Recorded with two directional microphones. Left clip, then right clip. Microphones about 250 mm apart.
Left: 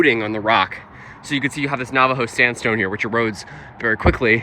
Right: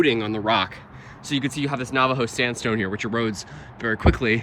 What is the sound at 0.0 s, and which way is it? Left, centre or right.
Speech, centre.